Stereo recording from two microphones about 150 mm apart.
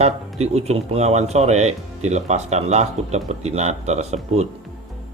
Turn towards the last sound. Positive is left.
turn(degrees=-50)  # may be behind; listen again after turning